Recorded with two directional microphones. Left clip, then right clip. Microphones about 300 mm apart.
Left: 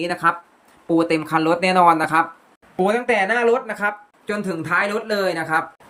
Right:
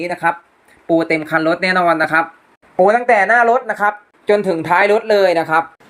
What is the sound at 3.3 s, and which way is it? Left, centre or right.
A man's voice, centre.